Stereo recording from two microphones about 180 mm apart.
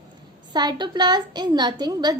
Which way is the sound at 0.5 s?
25° right (ahead or behind).